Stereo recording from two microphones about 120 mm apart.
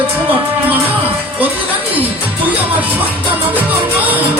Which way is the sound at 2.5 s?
15° right (ahead or behind).